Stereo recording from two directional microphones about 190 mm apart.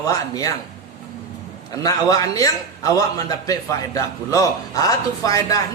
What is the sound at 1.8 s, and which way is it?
A man's voice, 15° left (ahead or behind).